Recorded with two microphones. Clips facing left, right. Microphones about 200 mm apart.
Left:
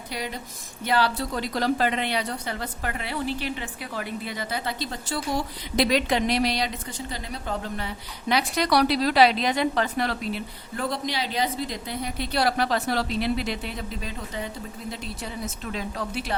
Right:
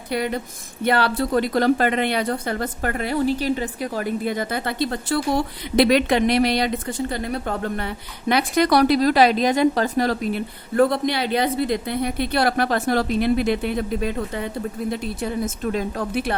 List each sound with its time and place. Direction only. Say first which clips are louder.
0.1 s a woman's voice: right 10 dB; 55° right (ahead or behind)